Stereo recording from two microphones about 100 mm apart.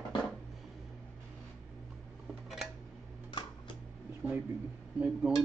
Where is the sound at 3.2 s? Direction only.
55° left (ahead or behind).